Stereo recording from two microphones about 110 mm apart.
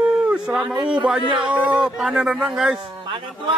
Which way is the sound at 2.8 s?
45° right (ahead or behind).